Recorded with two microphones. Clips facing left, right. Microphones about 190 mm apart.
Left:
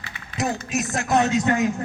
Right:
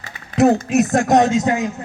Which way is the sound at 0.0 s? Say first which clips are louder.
Right 12 dB; 45° right (ahead or behind).